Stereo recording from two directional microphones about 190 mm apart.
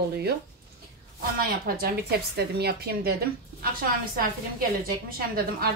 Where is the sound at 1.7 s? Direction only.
50° right (ahead or behind).